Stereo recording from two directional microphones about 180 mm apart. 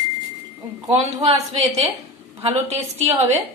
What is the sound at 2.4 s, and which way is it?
Speech, 35° right (ahead or behind).